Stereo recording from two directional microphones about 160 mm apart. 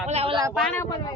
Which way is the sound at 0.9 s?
25° left (ahead or behind).